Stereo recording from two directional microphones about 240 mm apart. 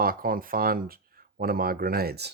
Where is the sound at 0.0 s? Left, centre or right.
Right.